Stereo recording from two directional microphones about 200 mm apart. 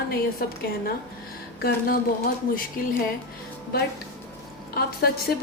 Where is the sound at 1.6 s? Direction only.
50° left (ahead or behind).